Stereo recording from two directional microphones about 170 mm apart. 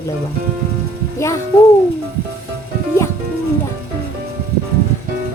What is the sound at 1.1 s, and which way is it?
Speech, 15° left (ahead or behind).